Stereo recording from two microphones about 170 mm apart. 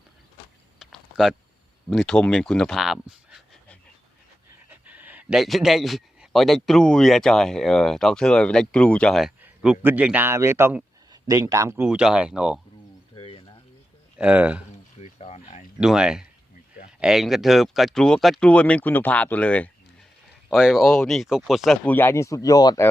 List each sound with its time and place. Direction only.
0.8 s a sound: centre (ahead or behind)
1.9 s speech: 5° left (ahead or behind)
4.7 s speech: 10° right (ahead or behind)
9.4 s a man's voice: 10° right (ahead or behind)
13.1 s a sound: 30° left (ahead or behind)
14.2 s a man's voice: 10° right (ahead or behind)
15.0 s a sound: 40° left (ahead or behind)
15.8 s speech: 5° right (ahead or behind)
20.5 s speech: centre (ahead or behind)
21.8 s speech: 10° left (ahead or behind)